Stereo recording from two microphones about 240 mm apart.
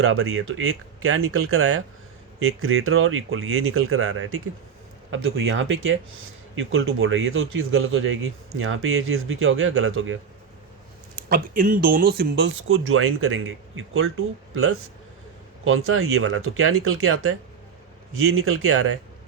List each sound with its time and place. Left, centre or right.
0.0 s speech: right
11.1 s speech: right